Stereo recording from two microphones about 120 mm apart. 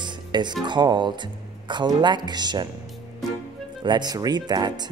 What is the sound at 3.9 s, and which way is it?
Speech, 35° right (ahead or behind).